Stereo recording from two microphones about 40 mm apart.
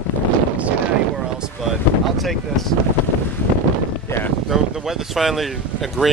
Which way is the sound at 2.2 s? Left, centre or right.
Centre.